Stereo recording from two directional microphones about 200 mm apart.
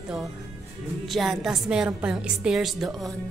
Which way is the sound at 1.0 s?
Centre (ahead or behind).